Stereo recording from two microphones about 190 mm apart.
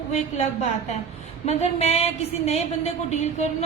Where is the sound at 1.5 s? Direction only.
35° left (ahead or behind).